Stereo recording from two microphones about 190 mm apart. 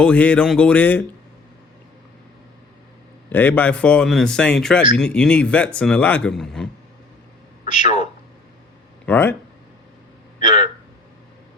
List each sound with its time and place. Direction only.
0.0 s speech: 5° left (ahead or behind)
3.2 s a man's voice: 10° left (ahead or behind)
9.0 s speech: 10° left (ahead or behind)
10.4 s a sound: 40° left (ahead or behind)